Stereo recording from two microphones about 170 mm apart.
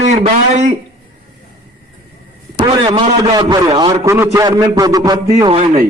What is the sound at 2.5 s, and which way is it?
A man's voice, 30° right (ahead or behind).